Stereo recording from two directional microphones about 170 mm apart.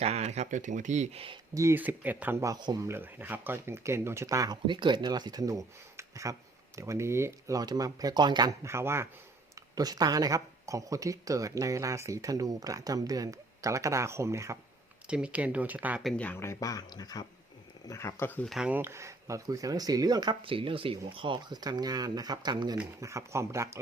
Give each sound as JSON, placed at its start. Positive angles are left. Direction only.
{"t": 0.0, "sound": "speech", "side_deg": -40}
{"t": 1.5, "sound": "speech", "side_deg": -15}
{"t": 16.1, "sound": "speech", "side_deg": 10}
{"t": 18.4, "sound": "speech", "side_deg": -5}